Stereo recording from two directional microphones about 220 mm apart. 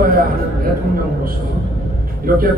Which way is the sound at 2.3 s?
40° right (ahead or behind).